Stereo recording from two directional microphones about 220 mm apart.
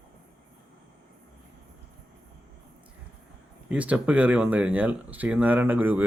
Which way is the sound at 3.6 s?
5° right (ahead or behind).